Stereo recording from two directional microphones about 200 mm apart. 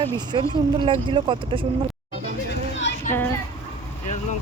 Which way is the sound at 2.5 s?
60° left (ahead or behind).